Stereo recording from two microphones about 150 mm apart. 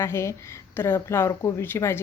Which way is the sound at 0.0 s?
20° left (ahead or behind).